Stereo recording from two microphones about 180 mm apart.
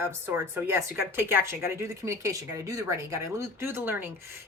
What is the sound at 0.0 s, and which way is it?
A woman's voice, 10° right (ahead or behind).